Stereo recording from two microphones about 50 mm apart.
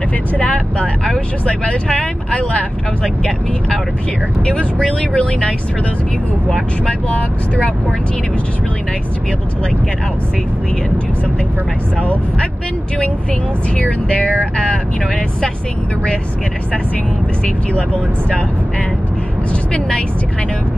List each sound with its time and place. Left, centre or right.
0.4 s speech: left
1.0 s speech: centre
2.0 s speech: left
3.0 s speech: centre
4.5 s speech: left
6.9 s speech: left
13.7 s speech: left